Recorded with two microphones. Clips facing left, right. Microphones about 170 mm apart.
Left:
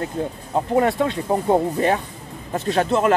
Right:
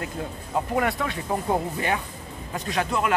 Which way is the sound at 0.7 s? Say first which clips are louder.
Left 9 dB; 25° left (ahead or behind).